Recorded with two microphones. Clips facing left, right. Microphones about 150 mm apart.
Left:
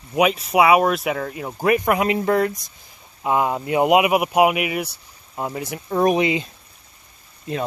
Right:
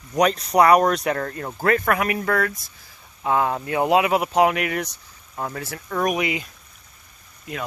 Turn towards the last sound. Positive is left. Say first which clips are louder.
# left 6 dB
turn(degrees=30)  # may be behind; listen again after turning